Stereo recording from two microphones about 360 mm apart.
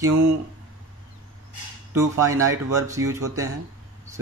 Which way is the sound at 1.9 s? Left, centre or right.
Centre.